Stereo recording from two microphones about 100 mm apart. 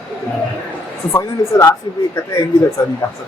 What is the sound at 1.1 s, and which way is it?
Speech, 30° left (ahead or behind).